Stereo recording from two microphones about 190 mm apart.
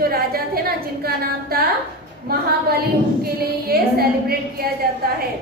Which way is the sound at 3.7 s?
55° right (ahead or behind).